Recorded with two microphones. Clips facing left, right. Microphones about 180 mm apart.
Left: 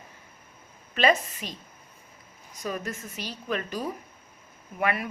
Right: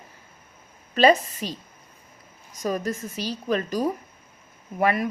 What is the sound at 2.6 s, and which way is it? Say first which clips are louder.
A woman's voice: right 6 dB; 40° right (ahead or behind).